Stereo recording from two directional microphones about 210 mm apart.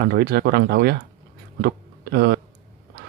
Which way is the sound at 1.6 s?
45° right (ahead or behind).